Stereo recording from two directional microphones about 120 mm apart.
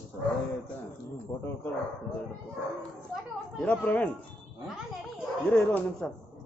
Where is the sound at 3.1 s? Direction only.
10° left (ahead or behind).